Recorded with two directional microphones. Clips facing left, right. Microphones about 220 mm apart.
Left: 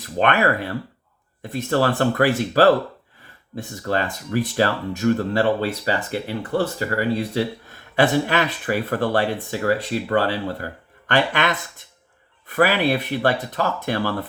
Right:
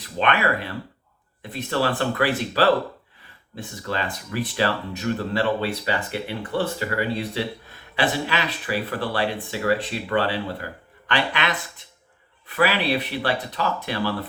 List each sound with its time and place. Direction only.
0.0 s speech: 45° left (ahead or behind)